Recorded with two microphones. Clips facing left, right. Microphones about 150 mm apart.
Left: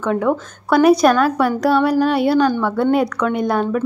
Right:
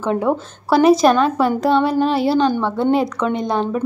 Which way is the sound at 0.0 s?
30° right (ahead or behind).